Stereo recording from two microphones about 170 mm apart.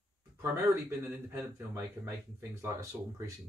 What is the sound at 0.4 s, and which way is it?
Speech, 15° right (ahead or behind).